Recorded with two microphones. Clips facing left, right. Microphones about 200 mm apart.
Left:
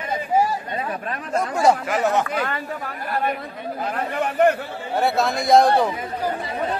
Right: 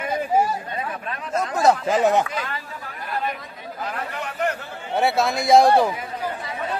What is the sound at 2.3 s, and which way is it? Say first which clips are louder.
Speech: left 5 dB; 60° left (ahead or behind).